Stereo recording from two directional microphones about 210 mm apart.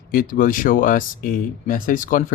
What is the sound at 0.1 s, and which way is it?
Speech, 40° left (ahead or behind).